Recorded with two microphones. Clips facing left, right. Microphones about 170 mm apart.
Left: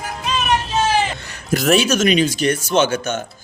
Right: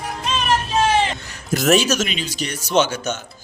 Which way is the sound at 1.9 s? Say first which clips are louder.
Left 7 dB; 55° left (ahead or behind).